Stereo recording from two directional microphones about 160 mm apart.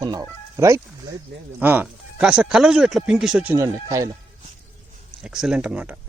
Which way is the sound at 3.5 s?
20° right (ahead or behind).